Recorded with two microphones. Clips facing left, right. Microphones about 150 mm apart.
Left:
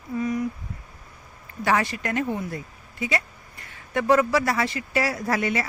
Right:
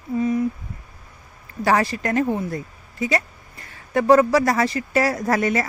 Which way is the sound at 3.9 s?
35° right (ahead or behind).